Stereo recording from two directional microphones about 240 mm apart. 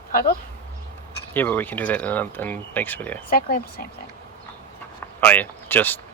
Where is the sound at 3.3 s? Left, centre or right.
Left.